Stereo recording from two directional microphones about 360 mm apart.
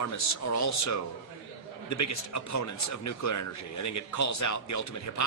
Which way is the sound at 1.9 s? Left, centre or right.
Left.